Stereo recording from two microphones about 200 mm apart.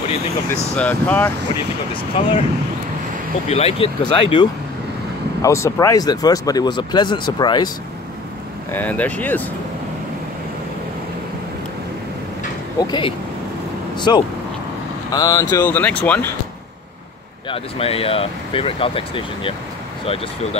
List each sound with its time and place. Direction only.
0.7 s speech: 10° left (ahead or behind)
2.1 s speech: 25° left (ahead or behind)
3.4 s speech: 30° left (ahead or behind)
8.7 s speech: 10° left (ahead or behind)
12.8 s speech: 25° left (ahead or behind); by 16.3 s 5° left (ahead or behind)
17.5 s speech: 30° left (ahead or behind)